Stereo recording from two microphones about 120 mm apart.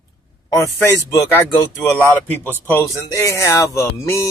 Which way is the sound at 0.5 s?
25° left (ahead or behind).